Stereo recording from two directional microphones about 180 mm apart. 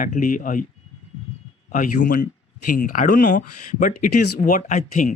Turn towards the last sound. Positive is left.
turn(degrees=45)  # may be behind; listen again after turning